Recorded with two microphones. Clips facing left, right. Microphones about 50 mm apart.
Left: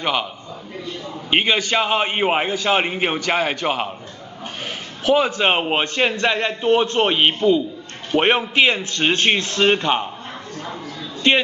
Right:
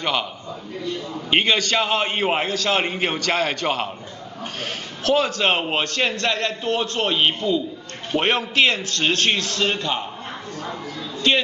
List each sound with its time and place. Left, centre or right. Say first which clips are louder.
0.0 s a man's voice: left 2 dB; centre
1.3 s a man's voice: left 1 dB; centre
5.0 s a man's voice: left 2 dB; centre
11.3 s a man's voice: left 3 dB; left